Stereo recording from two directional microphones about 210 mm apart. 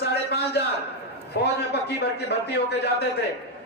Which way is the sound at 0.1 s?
50° left (ahead or behind).